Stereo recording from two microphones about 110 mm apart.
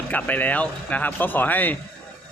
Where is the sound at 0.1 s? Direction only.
15° left (ahead or behind).